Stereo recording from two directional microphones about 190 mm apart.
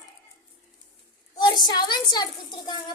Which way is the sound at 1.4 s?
20° left (ahead or behind).